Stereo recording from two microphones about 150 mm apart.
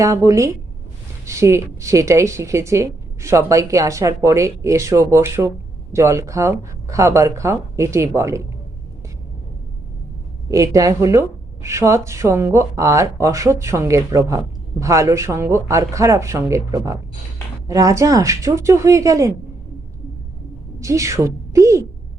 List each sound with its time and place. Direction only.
0.0 s a woman's voice: 20° right (ahead or behind)
10.5 s a woman's voice: 20° right (ahead or behind)
20.7 s a woman's voice: 20° right (ahead or behind)